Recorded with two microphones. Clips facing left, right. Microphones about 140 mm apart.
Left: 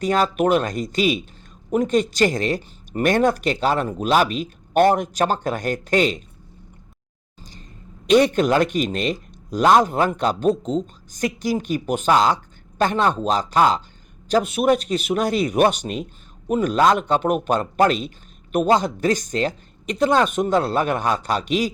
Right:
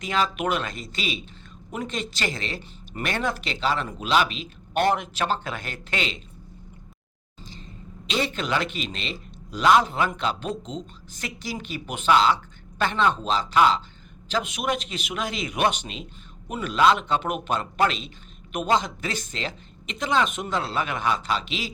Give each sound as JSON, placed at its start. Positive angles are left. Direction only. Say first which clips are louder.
{"t": 0.0, "sound": "speech", "louder": "left 7 dB", "side_deg": 40}
{"t": 8.0, "sound": "a man's voice", "louder": "left 12 dB", "side_deg": 50}